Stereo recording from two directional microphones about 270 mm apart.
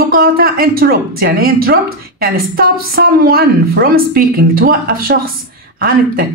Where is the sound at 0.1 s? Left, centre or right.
Right.